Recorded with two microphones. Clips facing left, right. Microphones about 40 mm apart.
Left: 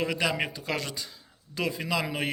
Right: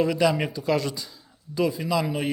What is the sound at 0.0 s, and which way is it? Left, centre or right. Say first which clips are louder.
A man's voice: right 6 dB; left.